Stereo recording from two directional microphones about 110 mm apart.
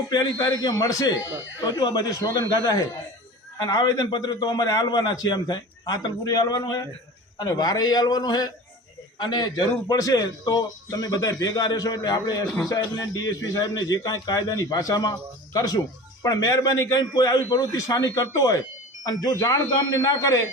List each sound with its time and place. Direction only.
0.1 s a man's voice: 40° left (ahead or behind)